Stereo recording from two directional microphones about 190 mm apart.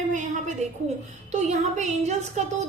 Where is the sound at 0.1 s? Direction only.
40° right (ahead or behind).